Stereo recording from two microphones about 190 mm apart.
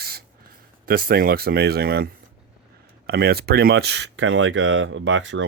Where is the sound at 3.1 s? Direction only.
55° right (ahead or behind).